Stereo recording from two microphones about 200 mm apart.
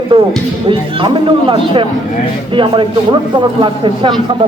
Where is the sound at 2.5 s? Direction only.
25° right (ahead or behind).